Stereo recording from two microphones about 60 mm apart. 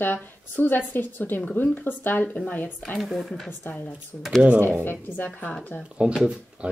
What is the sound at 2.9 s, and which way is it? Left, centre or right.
Speech, centre.